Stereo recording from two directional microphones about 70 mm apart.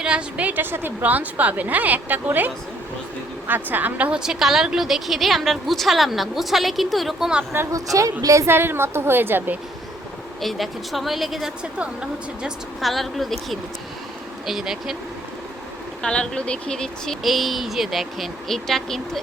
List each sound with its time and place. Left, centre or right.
0.0 s a woman's voice: centre
4.2 s a woman's voice: centre
8.2 s a woman's voice: right
8.4 s a woman's voice: right
10.4 s a woman's voice: centre
12.8 s a woman's voice: centre
16.0 s a woman's voice: centre